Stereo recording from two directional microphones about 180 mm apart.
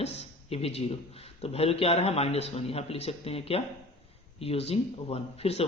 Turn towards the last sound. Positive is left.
turn(degrees=35)  # may be behind; listen again after turning